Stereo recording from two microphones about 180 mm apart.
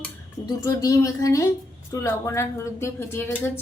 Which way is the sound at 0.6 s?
20° left (ahead or behind).